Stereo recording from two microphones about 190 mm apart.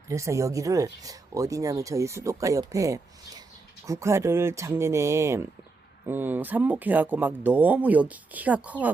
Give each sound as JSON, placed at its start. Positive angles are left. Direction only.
{"t": 0.1, "sound": "speech", "side_deg": -15}